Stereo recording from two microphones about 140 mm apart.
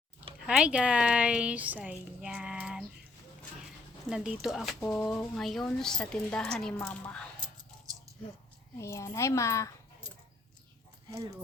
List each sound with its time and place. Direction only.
0.4 s a woman's voice: 5° right (ahead or behind)
4.1 s speech: 5° right (ahead or behind)
8.8 s a child's voice: 20° left (ahead or behind)
11.1 s speech: 25° right (ahead or behind)